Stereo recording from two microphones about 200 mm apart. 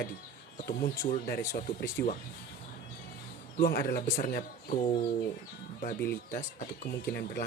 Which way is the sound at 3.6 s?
50° left (ahead or behind).